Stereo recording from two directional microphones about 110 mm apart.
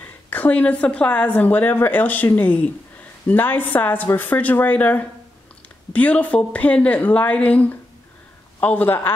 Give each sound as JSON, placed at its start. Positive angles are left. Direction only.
{"t": 0.0, "sound": "a woman's voice", "side_deg": 15}